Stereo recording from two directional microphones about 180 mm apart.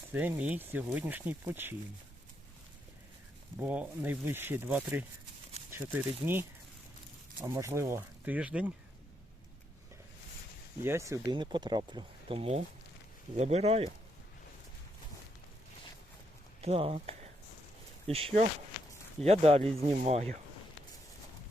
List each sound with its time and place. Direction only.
0.1 s speech: 10° right (ahead or behind)
3.6 s speech: 10° right (ahead or behind)
5.5 s a sound: 35° right (ahead or behind)
5.9 s speech: 10° right (ahead or behind)
7.4 s speech: 15° right (ahead or behind)
10.8 s speech: 15° right (ahead or behind); by 13.9 s 35° right (ahead or behind)
16.6 s speech: 30° right (ahead or behind)